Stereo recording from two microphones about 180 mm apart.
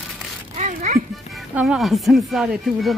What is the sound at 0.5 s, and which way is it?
Music, 40° right (ahead or behind).